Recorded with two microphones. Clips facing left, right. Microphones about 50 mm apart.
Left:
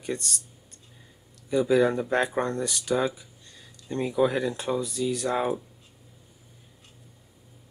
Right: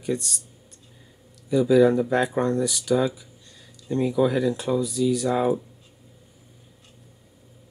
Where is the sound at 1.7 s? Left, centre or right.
Left.